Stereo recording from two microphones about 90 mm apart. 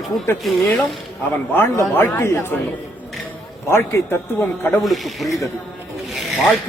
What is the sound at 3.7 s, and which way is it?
Speech, 30° left (ahead or behind).